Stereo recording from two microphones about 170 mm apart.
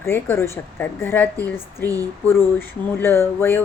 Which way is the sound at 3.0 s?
15° left (ahead or behind).